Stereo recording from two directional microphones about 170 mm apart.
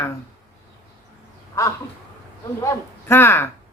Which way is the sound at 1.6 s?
15° left (ahead or behind).